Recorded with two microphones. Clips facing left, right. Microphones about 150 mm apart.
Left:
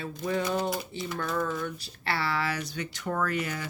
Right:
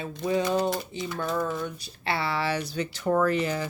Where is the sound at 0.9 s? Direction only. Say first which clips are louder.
Right 2 dB; 20° right (ahead or behind).